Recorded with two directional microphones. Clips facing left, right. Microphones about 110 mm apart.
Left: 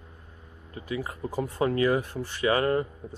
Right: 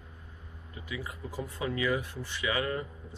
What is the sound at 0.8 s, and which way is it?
Speech, 45° left (ahead or behind).